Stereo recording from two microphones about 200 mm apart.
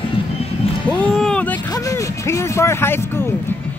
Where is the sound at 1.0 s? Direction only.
5° left (ahead or behind).